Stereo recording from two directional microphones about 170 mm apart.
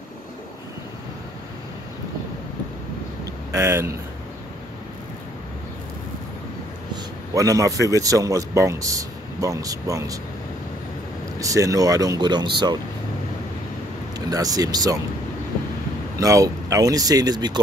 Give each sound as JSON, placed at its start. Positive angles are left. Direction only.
{"t": 3.5, "sound": "speech", "side_deg": -15}
{"t": 6.9, "sound": "a sound", "side_deg": -20}
{"t": 7.9, "sound": "speech", "side_deg": -20}
{"t": 11.3, "sound": "speech", "side_deg": -20}
{"t": 14.3, "sound": "speech", "side_deg": -20}
{"t": 16.2, "sound": "speech", "side_deg": -20}